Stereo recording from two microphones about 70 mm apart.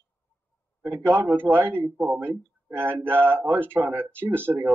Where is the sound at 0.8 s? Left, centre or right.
Right.